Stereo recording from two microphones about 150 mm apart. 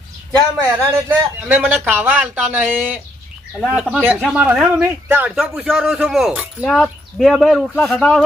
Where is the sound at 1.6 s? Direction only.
10° right (ahead or behind).